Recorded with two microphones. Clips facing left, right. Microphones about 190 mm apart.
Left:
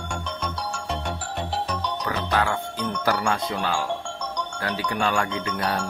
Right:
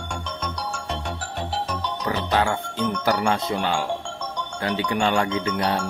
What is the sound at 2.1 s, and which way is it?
Speech, 25° right (ahead or behind).